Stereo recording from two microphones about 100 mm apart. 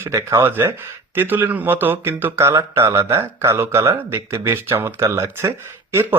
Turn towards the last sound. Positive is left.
turn(degrees=-25)  # may be behind; listen again after turning